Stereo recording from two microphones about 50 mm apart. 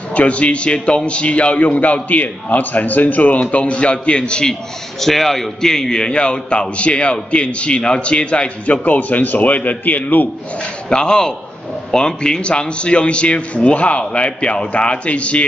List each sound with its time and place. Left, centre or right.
0.1 s a man's voice: left
5.0 s a man's voice: centre; by 10.2 s left
10.6 s a man's voice: centre